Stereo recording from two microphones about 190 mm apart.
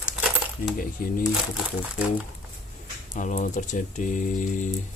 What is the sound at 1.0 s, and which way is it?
Speech, 50° left (ahead or behind).